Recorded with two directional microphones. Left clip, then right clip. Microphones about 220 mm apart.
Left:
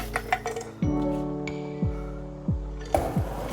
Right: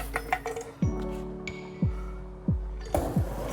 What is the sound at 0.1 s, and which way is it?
Music, 45° left (ahead or behind).